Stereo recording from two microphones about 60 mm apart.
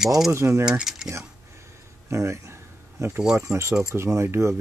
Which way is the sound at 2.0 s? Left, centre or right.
Right.